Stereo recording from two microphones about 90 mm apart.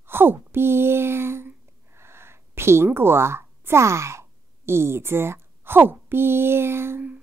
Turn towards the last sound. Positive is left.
turn(degrees=-20)  # may be behind; listen again after turning